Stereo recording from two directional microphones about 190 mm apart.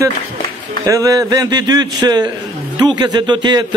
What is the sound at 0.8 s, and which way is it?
A man's voice, 15° right (ahead or behind).